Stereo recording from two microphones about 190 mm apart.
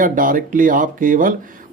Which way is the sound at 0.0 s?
45° right (ahead or behind).